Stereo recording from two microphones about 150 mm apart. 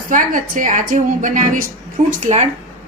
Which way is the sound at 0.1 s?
65° right (ahead or behind).